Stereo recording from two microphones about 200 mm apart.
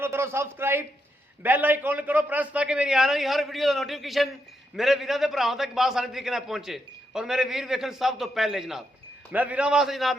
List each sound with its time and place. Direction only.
0.0 s a man's voice: 10° right (ahead or behind)